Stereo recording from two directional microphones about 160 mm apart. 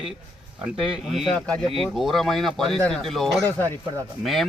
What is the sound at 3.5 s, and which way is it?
Speech, 10° left (ahead or behind).